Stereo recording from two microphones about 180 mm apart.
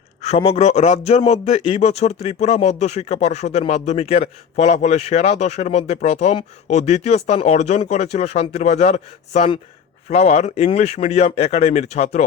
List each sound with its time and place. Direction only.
0.2 s a man's voice: 35° left (ahead or behind)